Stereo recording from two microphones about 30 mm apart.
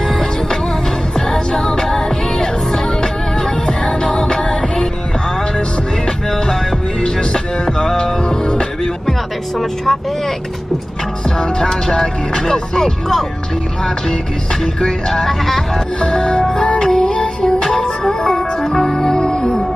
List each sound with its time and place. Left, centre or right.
0.1 s music: centre; by 4.6 s left
6.3 s music: centre
7.0 s music: left
9.6 s vehicle: centre
11.2 s music: left
14.9 s music: left
15.2 s vehicle: centre
16.0 s music: left